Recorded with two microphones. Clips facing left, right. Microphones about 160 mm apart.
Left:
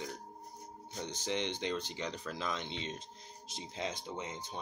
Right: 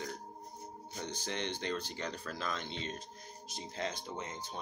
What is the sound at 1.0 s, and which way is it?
Speech, 20° left (ahead or behind).